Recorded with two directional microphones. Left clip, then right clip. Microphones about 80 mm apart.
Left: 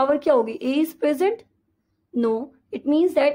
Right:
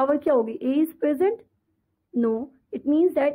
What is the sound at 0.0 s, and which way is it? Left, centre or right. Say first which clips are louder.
A woman's voice: left 2 dB; left.